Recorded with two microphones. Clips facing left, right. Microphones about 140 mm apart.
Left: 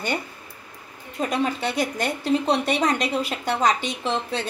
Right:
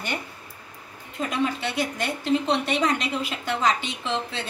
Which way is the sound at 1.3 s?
45° left (ahead or behind).